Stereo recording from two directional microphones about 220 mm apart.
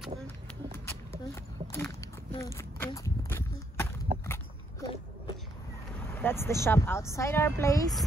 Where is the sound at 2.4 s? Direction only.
10° left (ahead or behind).